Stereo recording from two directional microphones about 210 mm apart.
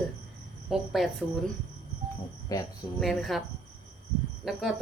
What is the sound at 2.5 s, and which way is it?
Speech, 15° left (ahead or behind).